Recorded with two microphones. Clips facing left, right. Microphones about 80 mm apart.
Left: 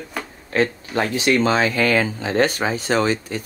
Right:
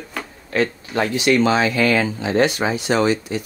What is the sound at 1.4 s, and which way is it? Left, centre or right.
Speech, left.